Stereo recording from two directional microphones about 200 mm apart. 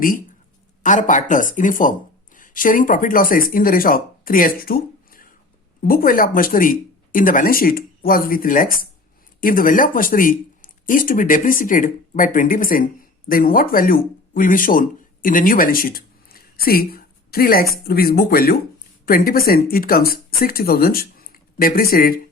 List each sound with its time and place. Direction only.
0.8 s speech: 40° left (ahead or behind)